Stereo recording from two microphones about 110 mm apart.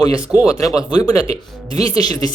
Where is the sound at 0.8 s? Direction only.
45° left (ahead or behind).